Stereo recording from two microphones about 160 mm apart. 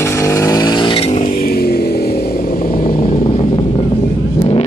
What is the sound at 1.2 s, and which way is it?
Vehicle, 65° left (ahead or behind).